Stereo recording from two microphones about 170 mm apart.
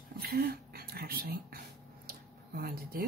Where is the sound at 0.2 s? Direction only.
65° right (ahead or behind).